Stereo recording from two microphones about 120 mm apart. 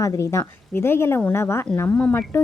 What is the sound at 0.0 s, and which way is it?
A woman's voice, 25° left (ahead or behind).